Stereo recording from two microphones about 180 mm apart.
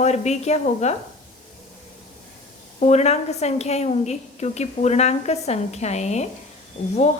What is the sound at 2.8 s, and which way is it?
A woman's voice, 40° left (ahead or behind).